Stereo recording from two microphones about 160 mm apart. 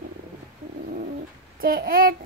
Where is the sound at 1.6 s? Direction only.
65° right (ahead or behind).